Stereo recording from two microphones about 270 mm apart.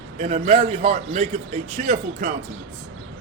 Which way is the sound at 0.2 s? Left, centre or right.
Right.